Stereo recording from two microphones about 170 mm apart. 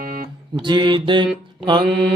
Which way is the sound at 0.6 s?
25° right (ahead or behind).